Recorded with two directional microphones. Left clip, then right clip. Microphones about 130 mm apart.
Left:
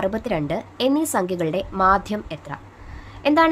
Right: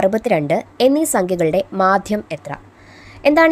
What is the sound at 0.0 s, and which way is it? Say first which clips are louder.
A woman's voice: right 8 dB; 55° right (ahead or behind).